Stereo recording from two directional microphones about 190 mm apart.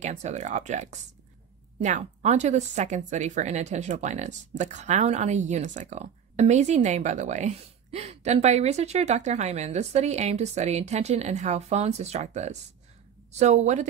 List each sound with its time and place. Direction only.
0.0 s speech: 35° right (ahead or behind)